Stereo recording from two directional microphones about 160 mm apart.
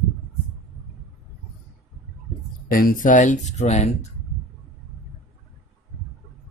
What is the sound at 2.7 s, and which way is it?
Speech, 60° left (ahead or behind).